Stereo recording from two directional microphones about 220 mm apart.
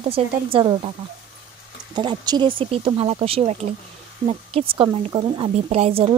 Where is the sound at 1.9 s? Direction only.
20° right (ahead or behind).